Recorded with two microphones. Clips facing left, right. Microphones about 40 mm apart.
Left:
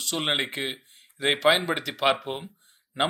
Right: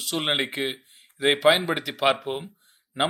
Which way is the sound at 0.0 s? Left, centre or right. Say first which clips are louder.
Right 1 dB; centre.